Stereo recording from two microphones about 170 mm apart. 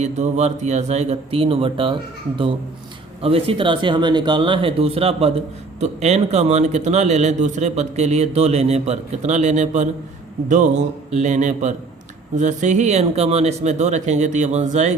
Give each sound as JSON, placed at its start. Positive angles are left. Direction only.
{"t": 0.0, "sound": "a man's voice", "side_deg": -40}
{"t": 3.2, "sound": "a man's voice", "side_deg": -35}